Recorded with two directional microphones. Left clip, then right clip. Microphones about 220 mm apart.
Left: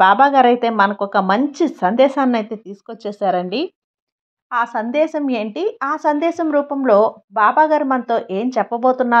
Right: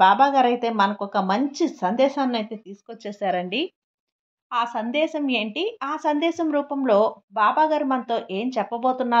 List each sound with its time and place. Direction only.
0.0 s speech: 30° left (ahead or behind)